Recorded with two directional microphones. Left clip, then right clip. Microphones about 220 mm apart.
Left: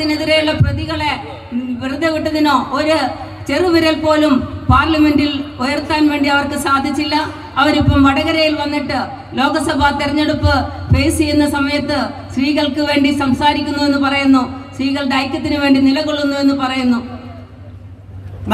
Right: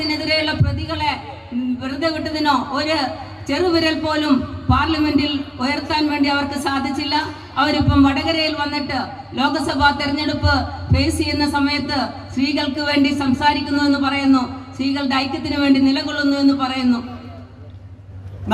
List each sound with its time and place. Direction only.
0.1 s a woman's voice: 15° left (ahead or behind)